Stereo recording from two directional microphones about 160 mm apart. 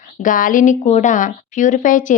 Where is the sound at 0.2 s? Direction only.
55° left (ahead or behind).